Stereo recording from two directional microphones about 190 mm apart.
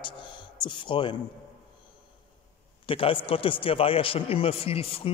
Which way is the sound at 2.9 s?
30° left (ahead or behind).